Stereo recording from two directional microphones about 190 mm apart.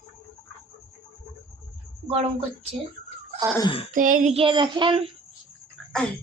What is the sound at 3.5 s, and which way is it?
Speech, 25° left (ahead or behind).